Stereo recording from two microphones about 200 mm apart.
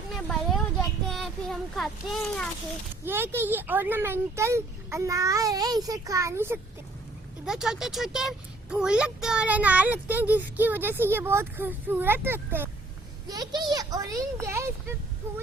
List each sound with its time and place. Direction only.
0.1 s a sound: centre (ahead or behind)
1.1 s a child's voice: centre (ahead or behind)
3.0 s a child's voice: 10° right (ahead or behind)